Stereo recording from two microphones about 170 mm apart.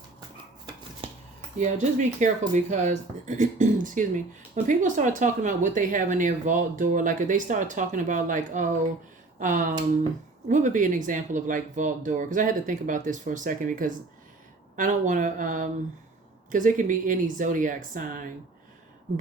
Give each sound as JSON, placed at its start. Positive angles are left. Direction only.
{"t": 1.5, "sound": "speech", "side_deg": -45}